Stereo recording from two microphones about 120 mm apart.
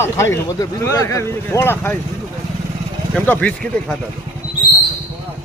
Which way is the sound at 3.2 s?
10° left (ahead or behind).